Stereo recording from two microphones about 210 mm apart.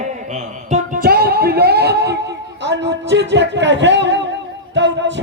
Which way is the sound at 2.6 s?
55° right (ahead or behind).